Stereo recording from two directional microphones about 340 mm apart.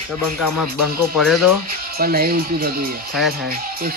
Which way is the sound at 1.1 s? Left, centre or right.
Centre.